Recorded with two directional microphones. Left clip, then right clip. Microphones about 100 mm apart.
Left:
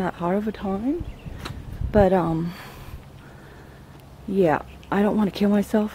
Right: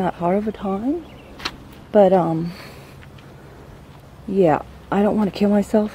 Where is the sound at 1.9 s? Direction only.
20° left (ahead or behind).